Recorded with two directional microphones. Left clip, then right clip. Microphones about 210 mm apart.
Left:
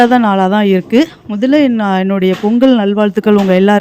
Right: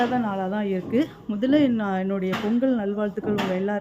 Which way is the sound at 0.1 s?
50° left (ahead or behind).